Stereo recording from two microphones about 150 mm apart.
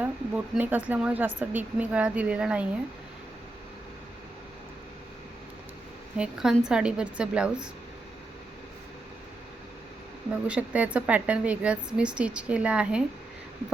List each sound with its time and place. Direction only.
0.0 s speech: 10° right (ahead or behind)
6.1 s a woman's voice: 5° right (ahead or behind)
10.4 s speech: 10° right (ahead or behind)